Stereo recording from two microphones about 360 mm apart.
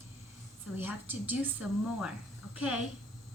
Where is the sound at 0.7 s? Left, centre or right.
Centre.